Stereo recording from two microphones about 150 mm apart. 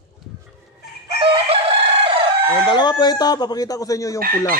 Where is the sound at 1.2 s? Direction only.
40° right (ahead or behind).